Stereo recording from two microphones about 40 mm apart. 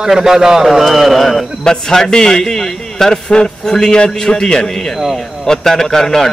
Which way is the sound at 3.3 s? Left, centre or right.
Left.